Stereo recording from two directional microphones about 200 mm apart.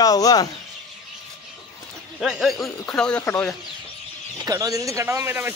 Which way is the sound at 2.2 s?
Centre (ahead or behind).